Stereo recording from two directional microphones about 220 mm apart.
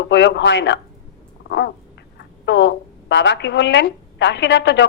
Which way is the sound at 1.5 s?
50° left (ahead or behind).